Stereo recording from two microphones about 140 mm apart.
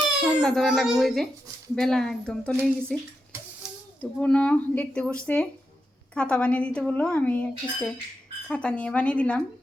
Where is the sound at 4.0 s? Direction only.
10° left (ahead or behind).